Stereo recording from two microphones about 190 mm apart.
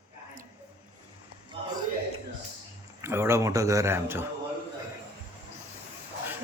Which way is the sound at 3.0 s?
15° right (ahead or behind).